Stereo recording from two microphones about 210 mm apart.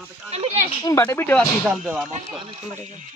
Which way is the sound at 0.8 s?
15° left (ahead or behind).